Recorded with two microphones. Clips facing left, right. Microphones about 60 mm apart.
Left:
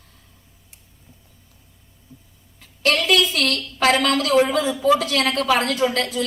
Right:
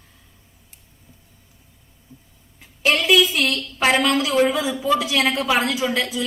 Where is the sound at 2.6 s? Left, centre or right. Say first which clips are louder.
Even; centre.